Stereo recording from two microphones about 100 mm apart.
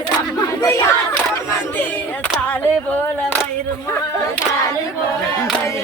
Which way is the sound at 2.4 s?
15° left (ahead or behind).